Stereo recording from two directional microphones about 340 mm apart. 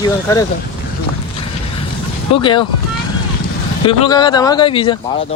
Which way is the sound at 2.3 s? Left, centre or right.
Centre.